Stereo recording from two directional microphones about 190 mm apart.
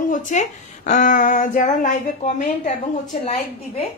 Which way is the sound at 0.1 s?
40° left (ahead or behind).